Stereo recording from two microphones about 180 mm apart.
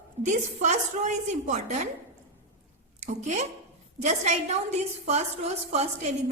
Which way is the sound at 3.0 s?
40° right (ahead or behind).